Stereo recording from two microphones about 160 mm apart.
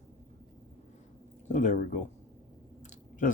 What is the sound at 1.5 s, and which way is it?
Speech, 50° left (ahead or behind).